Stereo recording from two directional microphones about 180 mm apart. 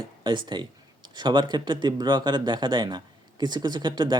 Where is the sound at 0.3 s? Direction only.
25° right (ahead or behind).